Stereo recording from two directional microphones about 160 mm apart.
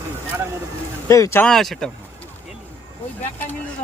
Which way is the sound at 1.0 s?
20° left (ahead or behind).